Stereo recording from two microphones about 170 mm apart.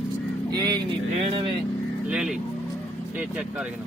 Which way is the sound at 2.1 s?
5° right (ahead or behind).